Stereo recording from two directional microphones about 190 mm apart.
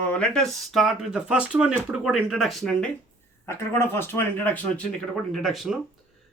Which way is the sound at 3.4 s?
15° left (ahead or behind).